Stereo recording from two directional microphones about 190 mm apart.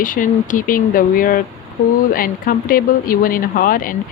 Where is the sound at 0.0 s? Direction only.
45° left (ahead or behind).